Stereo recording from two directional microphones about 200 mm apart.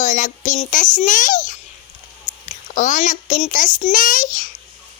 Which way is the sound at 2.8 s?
40° left (ahead or behind).